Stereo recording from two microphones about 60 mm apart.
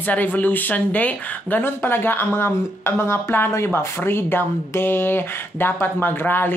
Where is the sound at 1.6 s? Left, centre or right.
Left.